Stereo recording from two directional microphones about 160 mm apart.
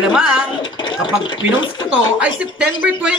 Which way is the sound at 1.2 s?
30° left (ahead or behind).